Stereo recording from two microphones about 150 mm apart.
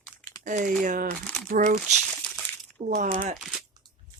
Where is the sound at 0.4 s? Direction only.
60° right (ahead or behind).